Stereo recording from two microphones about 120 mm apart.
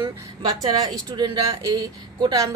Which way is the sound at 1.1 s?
35° right (ahead or behind).